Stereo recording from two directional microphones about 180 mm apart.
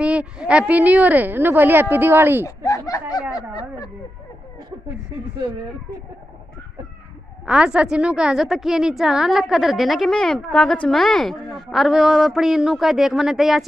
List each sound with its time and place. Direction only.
0.0 s a woman's voice: 5° right (ahead or behind)
2.4 s speech: 20° left (ahead or behind)
7.4 s a woman's voice: 5° right (ahead or behind)